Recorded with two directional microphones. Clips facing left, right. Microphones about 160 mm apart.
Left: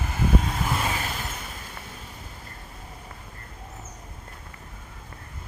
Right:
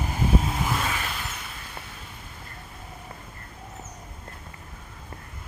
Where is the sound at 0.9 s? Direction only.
40° left (ahead or behind).